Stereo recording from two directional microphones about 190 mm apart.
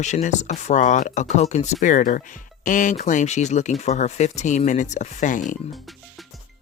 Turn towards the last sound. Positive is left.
turn(degrees=45)  # may be behind; listen again after turning